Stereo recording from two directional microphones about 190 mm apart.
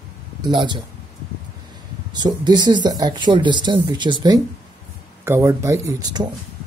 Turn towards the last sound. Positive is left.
turn(degrees=-20)  # may be behind; listen again after turning